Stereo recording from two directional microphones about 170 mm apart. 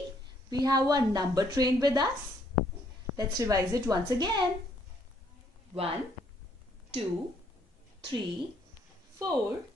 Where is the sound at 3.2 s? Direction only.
20° right (ahead or behind).